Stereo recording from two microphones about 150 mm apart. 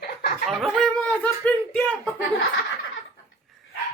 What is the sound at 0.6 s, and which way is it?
Speech, 5° left (ahead or behind).